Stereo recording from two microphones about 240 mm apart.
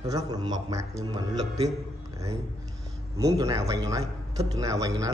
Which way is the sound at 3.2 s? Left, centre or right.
Centre.